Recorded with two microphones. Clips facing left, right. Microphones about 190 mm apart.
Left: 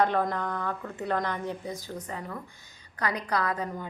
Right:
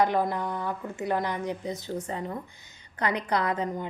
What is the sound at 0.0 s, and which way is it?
A woman's voice, 10° right (ahead or behind).